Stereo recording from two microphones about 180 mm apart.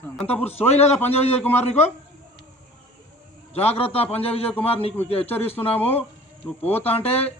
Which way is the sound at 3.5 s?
35° left (ahead or behind).